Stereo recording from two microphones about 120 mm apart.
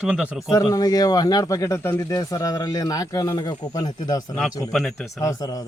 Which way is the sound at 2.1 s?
30° left (ahead or behind).